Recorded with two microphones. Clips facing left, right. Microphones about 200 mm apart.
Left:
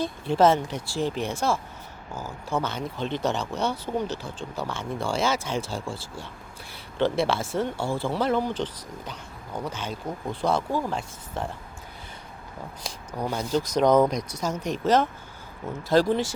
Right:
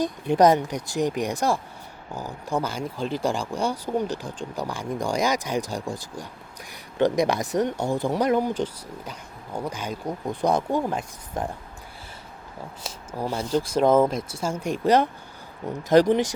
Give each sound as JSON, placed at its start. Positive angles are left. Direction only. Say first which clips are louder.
{"t": 0.0, "sound": "speech", "louder": "right 2 dB", "side_deg": -15}
{"t": 13.1, "sound": "speech", "louder": "right 1 dB", "side_deg": -10}